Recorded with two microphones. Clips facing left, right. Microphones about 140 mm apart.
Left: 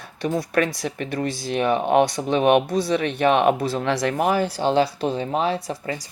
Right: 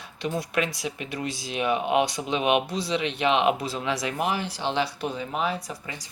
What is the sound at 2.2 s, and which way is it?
Speech, 20° left (ahead or behind).